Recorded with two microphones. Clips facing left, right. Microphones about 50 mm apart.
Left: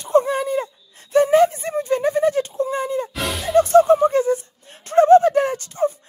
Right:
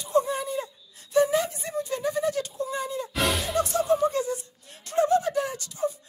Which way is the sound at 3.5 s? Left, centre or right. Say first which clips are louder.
Left 14 dB; left.